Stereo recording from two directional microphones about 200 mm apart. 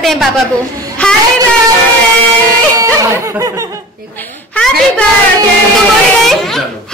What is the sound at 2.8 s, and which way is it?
Laughter, 15° right (ahead or behind).